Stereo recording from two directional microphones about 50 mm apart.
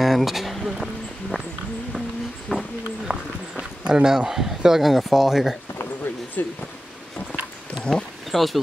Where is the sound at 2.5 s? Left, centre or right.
Centre.